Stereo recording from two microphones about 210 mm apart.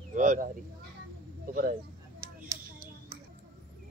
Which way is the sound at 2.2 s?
15° right (ahead or behind).